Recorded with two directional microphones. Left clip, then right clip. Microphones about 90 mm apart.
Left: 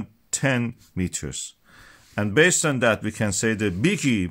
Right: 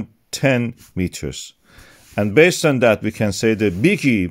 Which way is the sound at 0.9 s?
40° right (ahead or behind).